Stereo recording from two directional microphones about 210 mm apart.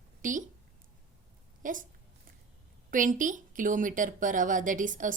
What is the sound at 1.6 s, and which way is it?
Speech, 40° right (ahead or behind).